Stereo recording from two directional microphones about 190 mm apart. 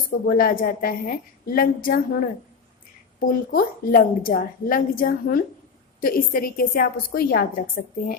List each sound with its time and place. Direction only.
0.3 s a woman's voice: 50° left (ahead or behind)